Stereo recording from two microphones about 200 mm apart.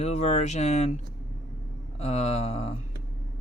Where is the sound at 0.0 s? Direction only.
35° left (ahead or behind).